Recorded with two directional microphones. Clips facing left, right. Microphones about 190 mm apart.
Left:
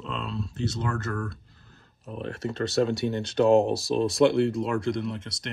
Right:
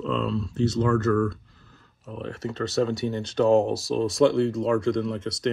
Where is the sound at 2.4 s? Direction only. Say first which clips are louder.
Even; 10° left (ahead or behind).